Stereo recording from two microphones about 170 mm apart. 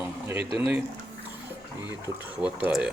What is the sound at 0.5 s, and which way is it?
Speech, 10° right (ahead or behind).